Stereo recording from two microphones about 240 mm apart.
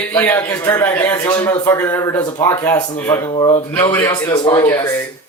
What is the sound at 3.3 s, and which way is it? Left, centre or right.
Speech, left.